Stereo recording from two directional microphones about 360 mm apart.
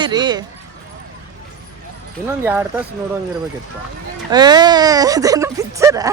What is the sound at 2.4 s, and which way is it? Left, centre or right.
Speech, centre.